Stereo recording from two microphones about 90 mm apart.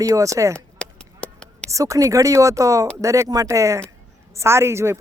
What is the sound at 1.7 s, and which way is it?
Speech, 35° right (ahead or behind).